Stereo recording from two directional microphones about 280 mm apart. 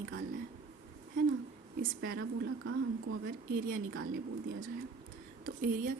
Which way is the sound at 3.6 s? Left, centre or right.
Right.